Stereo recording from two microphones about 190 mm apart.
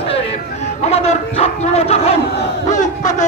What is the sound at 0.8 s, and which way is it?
Bow-wow, 35° left (ahead or behind).